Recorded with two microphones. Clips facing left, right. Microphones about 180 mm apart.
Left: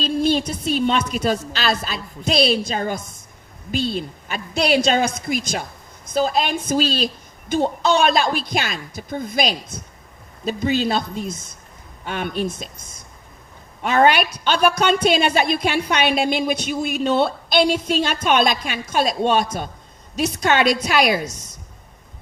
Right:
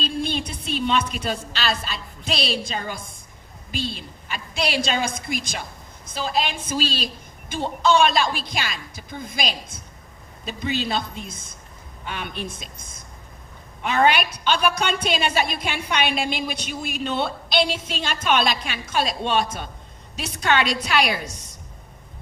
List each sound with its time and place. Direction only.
0.0 s a woman's voice: 40° left (ahead or behind)
13.8 s a woman's voice: 45° left (ahead or behind)